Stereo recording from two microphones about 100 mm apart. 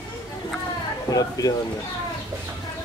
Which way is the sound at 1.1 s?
40° left (ahead or behind).